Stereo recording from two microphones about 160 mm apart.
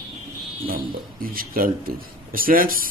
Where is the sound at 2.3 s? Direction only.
60° right (ahead or behind).